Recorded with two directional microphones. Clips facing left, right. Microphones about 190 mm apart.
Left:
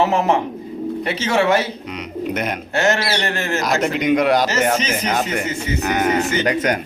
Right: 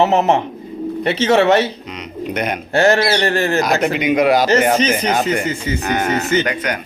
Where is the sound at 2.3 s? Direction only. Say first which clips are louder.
Right 3 dB; centre (ahead or behind).